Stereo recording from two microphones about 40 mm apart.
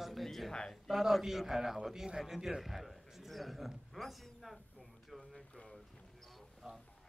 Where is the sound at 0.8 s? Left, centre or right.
Centre.